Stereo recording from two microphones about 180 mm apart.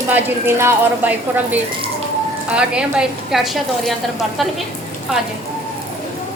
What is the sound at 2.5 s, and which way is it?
Speech, 5° right (ahead or behind).